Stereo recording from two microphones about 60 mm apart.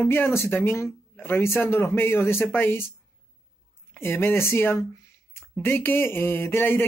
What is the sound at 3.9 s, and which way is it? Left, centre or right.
Speech, left.